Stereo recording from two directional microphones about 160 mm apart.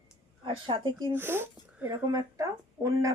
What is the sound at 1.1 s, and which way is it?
Speech, 15° right (ahead or behind).